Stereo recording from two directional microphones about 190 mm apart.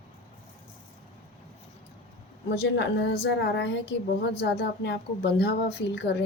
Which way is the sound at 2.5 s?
65° left (ahead or behind).